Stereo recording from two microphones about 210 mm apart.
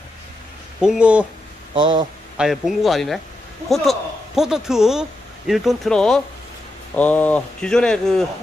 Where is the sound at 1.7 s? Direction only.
25° right (ahead or behind).